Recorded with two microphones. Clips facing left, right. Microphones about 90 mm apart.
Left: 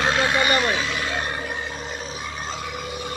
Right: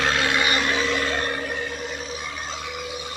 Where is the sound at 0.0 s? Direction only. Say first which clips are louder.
Left 2 dB; 15° left (ahead or behind).